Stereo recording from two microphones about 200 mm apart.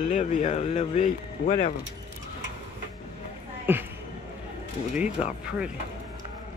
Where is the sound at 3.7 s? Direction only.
10° right (ahead or behind).